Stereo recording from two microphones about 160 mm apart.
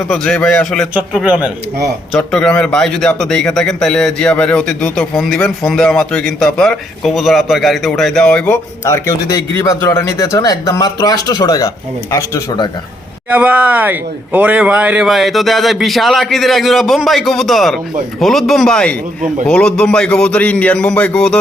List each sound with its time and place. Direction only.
0.1 s a man's voice: 5° left (ahead or behind)
2.1 s speech: 5° left (ahead or behind)
8.8 s speech: 20° left (ahead or behind)
13.3 s a man's voice: 10° right (ahead or behind); by 21.3 s 5° left (ahead or behind)